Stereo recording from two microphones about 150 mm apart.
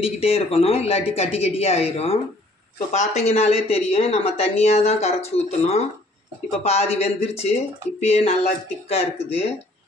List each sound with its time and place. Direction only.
0.0 s speech: 40° left (ahead or behind)